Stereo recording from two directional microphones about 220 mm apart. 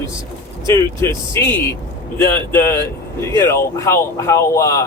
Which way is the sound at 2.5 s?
10° left (ahead or behind).